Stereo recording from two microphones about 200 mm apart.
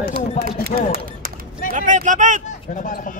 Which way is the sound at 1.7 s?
40° right (ahead or behind).